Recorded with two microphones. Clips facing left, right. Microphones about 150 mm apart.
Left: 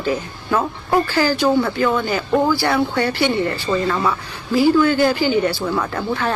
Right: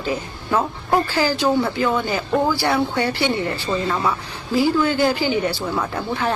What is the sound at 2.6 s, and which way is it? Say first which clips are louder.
Speech: left 1 dB; 15° right (ahead or behind).